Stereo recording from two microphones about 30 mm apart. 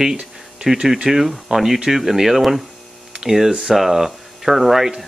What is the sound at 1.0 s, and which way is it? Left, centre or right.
Speech, centre.